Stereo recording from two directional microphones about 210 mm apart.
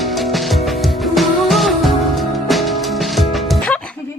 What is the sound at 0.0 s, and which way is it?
Music, centre (ahead or behind).